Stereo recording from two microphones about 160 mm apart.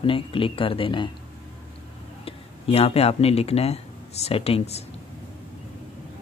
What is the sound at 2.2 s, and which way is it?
Speech, 40° left (ahead or behind).